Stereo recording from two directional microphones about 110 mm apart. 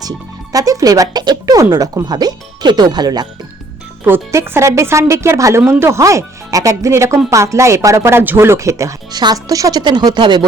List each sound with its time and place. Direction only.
0.5 s speech: 30° right (ahead or behind)
4.0 s speech: 25° right (ahead or behind); by 10.4 s 40° right (ahead or behind)